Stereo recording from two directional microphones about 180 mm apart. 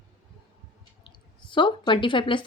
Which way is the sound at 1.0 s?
25° left (ahead or behind).